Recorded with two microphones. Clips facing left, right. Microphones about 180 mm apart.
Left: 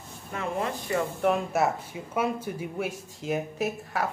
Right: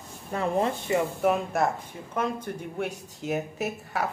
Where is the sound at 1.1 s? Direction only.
Centre (ahead or behind).